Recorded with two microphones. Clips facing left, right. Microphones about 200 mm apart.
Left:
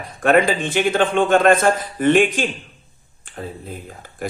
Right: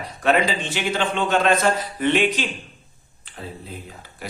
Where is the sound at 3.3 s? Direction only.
50° left (ahead or behind).